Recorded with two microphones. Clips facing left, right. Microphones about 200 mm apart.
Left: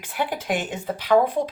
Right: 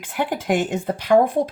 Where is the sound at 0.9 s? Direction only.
50° right (ahead or behind).